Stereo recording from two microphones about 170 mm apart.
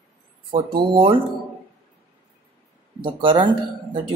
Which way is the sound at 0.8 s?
30° right (ahead or behind).